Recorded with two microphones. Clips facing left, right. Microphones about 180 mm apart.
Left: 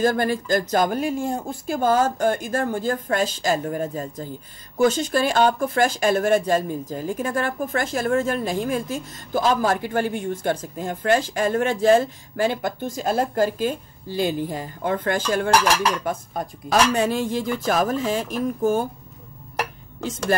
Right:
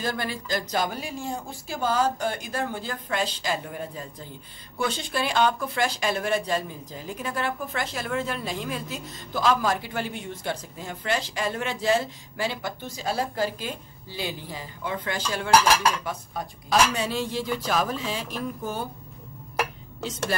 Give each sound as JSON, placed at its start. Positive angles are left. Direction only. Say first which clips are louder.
{"t": 0.0, "sound": "speech", "louder": "left 9 dB", "side_deg": 45}
{"t": 20.0, "sound": "speech", "louder": "left 6 dB", "side_deg": 50}